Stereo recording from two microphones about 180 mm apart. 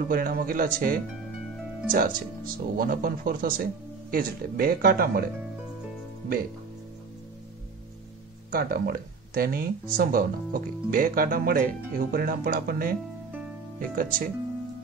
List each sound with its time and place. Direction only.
0.1 s speech: 55° right (ahead or behind)
8.5 s speech: 55° right (ahead or behind)